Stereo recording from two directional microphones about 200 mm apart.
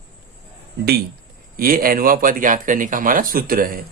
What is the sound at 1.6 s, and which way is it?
Speech, 45° right (ahead or behind).